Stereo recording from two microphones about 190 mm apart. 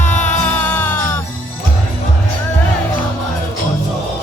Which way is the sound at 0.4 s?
10° left (ahead or behind).